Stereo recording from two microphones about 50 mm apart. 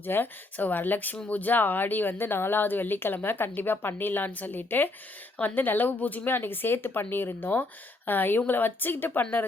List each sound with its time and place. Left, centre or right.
0.0 s speech: left
7.5 s speech: left